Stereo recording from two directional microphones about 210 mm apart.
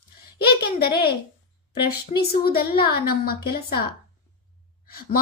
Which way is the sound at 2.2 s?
45° left (ahead or behind).